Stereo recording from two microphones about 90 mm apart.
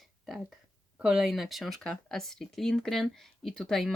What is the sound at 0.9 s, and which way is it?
Speech, 5° right (ahead or behind).